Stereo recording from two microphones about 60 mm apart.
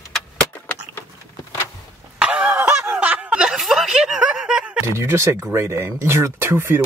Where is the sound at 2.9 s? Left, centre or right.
Right.